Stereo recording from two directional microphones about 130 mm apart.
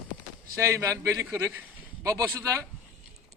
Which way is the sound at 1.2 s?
10° right (ahead or behind).